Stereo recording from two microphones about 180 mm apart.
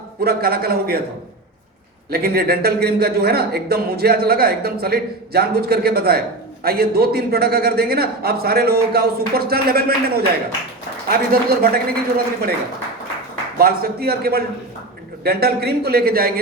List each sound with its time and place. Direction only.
0.3 s a man's voice: 60° right (ahead or behind)
2.0 s a man's voice: 60° right (ahead or behind)
13.6 s a man's voice: 55° right (ahead or behind)